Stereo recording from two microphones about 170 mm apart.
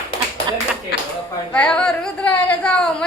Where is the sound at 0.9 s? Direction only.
70° left (ahead or behind).